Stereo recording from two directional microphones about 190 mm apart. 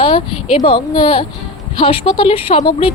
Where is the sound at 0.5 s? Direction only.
30° left (ahead or behind).